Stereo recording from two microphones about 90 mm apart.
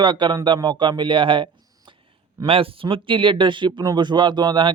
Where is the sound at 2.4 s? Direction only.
90° right; by 4.7 s 55° right (ahead or behind).